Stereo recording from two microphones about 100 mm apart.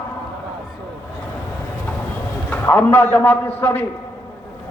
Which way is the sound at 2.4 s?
20° left (ahead or behind).